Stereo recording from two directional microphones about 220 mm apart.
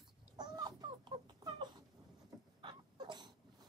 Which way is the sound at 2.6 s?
20° right (ahead or behind).